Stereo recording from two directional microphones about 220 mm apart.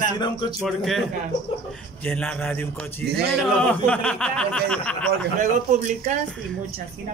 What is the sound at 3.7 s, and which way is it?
Speech, 5° left (ahead or behind).